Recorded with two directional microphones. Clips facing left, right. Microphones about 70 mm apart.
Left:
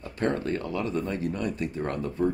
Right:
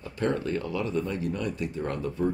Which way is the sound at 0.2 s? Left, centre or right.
Left.